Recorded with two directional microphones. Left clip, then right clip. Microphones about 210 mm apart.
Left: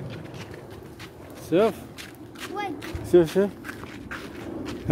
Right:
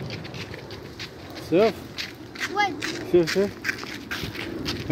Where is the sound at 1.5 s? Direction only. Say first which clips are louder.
Right 1 dB; 20° left (ahead or behind).